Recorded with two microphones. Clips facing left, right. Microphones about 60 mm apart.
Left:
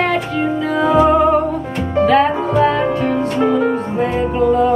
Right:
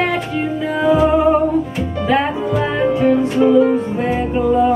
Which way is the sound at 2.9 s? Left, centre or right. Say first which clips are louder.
Right 3 dB; centre.